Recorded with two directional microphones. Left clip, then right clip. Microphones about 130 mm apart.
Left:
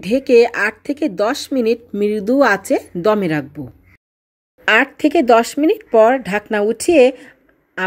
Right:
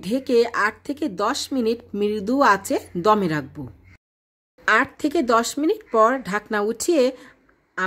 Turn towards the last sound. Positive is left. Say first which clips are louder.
# left 8 dB
turn(degrees=20)  # may be behind; listen again after turning